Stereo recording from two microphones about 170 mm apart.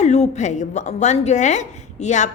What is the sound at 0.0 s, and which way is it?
A woman's voice, 40° left (ahead or behind).